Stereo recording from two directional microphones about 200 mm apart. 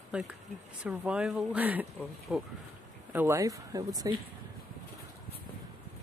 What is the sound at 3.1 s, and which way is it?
Speech, 10° right (ahead or behind).